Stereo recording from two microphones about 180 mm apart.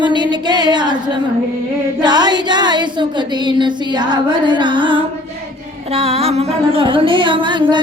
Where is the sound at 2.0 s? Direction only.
25° right (ahead or behind).